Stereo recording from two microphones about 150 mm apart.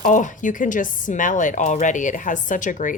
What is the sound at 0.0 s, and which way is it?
A woman's voice, 60° left (ahead or behind).